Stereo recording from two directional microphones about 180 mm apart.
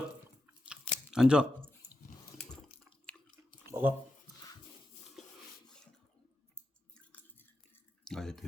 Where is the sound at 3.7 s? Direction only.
10° right (ahead or behind).